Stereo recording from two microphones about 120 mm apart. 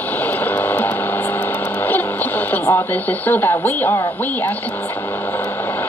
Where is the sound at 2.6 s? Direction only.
20° left (ahead or behind).